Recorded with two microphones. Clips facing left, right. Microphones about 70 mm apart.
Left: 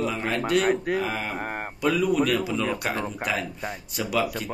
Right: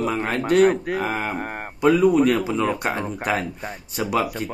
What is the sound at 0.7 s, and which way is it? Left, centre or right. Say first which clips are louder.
Speech: even; centre.